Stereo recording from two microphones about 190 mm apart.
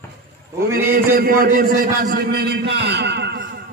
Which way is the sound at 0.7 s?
10° right (ahead or behind).